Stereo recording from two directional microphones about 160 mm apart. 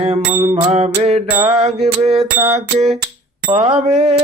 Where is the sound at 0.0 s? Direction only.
40° right (ahead or behind).